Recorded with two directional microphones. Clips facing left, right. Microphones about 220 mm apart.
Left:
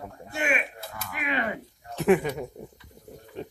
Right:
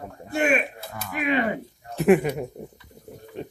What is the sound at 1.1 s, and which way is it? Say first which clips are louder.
Speech: right 7 dB; 30° right (ahead or behind).